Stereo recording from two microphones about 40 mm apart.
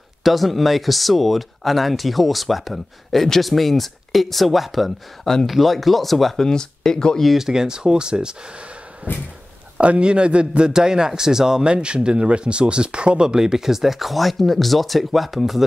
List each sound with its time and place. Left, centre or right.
0.2 s speech: centre
6.3 s speech: centre
7.3 s speech: centre
9.0 s speech: right
9.8 s speech: right
10.7 s speech: centre